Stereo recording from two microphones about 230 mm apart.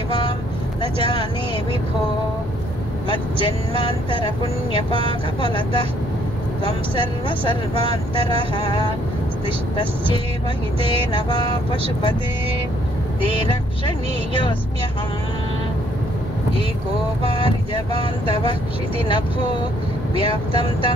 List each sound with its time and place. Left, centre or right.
3.1 s speech: left
5.4 s speech: left
10.8 s music: right
17.2 s speech: left
20.2 s speech: left